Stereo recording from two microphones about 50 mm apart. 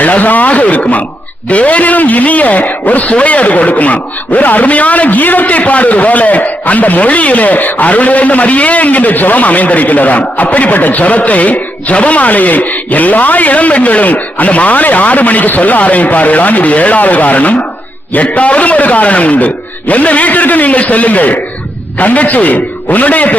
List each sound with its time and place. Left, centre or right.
0.0 s a man's voice: left